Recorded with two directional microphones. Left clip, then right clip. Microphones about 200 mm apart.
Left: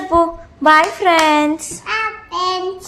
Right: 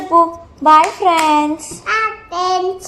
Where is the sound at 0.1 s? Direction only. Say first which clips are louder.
Right 3 dB; 25° left (ahead or behind).